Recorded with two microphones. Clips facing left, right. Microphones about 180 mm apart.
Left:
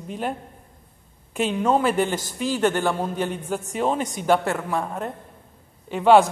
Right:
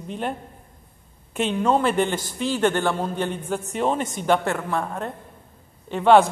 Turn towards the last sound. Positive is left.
turn(degrees=5)  # may be behind; listen again after turning